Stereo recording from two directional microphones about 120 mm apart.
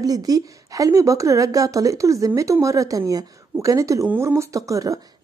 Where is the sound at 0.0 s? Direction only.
30° right (ahead or behind).